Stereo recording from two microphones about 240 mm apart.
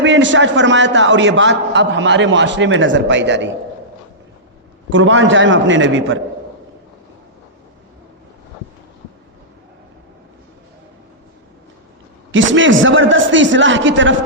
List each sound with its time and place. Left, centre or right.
0.0 s a man's voice: right
4.9 s a man's voice: right
12.3 s a man's voice: right